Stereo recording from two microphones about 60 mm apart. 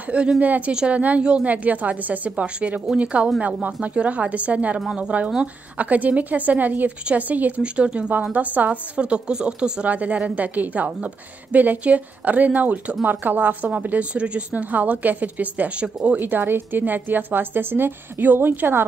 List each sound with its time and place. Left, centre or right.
0.4 s a woman's voice: right
13.8 s a woman's voice: right
16.2 s speech: right